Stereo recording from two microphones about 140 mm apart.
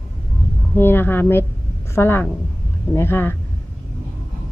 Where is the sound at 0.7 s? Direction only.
15° left (ahead or behind).